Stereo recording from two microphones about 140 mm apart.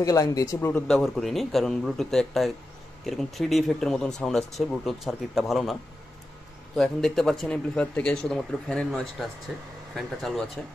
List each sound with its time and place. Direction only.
0.0 s speech: 25° left (ahead or behind)
0.8 s speech: centre (ahead or behind)